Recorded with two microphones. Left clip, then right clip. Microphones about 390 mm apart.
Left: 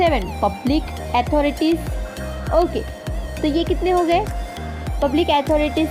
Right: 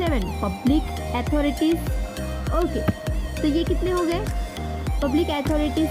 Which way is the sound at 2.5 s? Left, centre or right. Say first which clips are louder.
Left 6 dB; centre.